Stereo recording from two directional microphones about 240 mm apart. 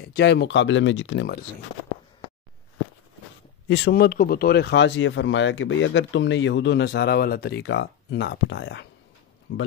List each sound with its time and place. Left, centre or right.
0.0 s speech: left
3.6 s speech: left